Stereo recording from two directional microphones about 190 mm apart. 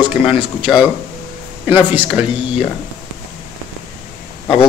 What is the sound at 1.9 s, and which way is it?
Speech, 10° right (ahead or behind).